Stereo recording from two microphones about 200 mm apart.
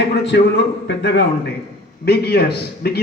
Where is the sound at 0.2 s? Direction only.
60° left (ahead or behind).